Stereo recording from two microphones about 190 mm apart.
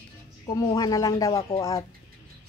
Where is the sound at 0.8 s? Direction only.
15° left (ahead or behind).